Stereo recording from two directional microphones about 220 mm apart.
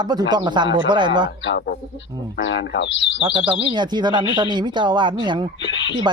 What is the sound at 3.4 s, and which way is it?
Speech, 20° right (ahead or behind).